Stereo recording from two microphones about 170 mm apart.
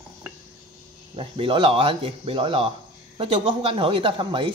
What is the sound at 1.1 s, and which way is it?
Speech, 35° right (ahead or behind).